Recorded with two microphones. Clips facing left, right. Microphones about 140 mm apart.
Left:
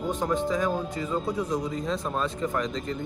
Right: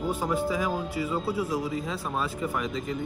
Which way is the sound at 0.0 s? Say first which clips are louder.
Left 1 dB; 10° right (ahead or behind).